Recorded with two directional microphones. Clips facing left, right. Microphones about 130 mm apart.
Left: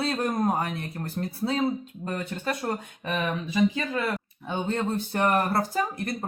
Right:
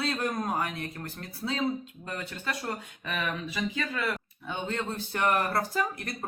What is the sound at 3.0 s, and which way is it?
Speech, 30° left (ahead or behind).